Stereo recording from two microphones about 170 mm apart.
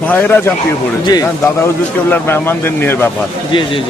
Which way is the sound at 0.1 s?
10° left (ahead or behind).